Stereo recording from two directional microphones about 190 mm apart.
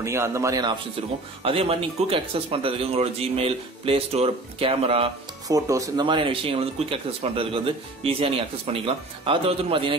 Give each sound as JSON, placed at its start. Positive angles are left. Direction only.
{"t": 0.0, "sound": "speech", "side_deg": -15}
{"t": 1.4, "sound": "speech", "side_deg": -30}
{"t": 5.5, "sound": "speech", "side_deg": -15}